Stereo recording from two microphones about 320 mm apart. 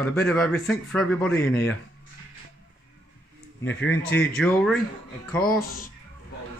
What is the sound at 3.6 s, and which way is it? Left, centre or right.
Speech, left.